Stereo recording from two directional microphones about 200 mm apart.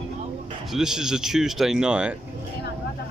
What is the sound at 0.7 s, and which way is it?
Speech, 5° right (ahead or behind).